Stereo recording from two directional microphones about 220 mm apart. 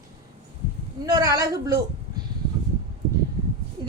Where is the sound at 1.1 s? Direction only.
15° right (ahead or behind).